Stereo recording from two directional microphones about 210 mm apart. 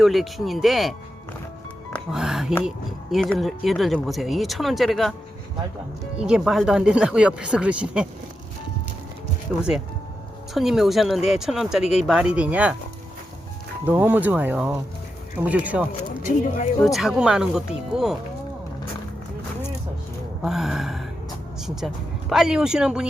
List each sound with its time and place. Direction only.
0.0 s speech: centre (ahead or behind)
6.1 s speech: 5° right (ahead or behind)
9.5 s speech: centre (ahead or behind)
13.8 s speech: 10° right (ahead or behind)
16.0 s speech: 40° left (ahead or behind)
16.8 s speech: centre (ahead or behind)
20.4 s speech: centre (ahead or behind)